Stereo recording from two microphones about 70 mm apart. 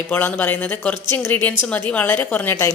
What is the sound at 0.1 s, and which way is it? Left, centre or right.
A woman's voice, left.